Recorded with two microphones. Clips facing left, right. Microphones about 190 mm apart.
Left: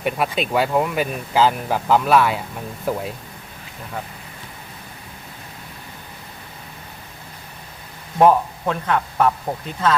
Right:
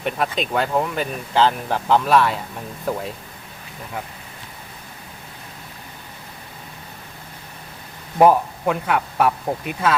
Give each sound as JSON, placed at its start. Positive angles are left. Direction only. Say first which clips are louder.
{"t": 0.0, "sound": "speech", "louder": "left 1 dB", "side_deg": 5}
{"t": 8.2, "sound": "speech", "louder": "even", "side_deg": -10}